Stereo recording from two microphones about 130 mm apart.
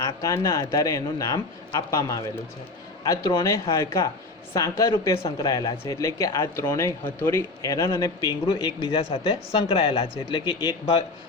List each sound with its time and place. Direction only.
0.0 s a man's voice: 25° left (ahead or behind)
8.3 s speech: 40° left (ahead or behind)